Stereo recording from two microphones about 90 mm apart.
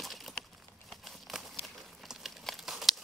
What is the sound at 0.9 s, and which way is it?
Crumpling, 5° left (ahead or behind).